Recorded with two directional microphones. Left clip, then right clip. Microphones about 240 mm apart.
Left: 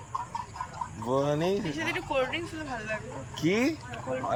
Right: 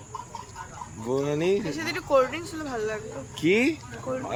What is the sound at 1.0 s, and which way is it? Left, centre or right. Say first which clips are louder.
Speech: right 2 dB; centre.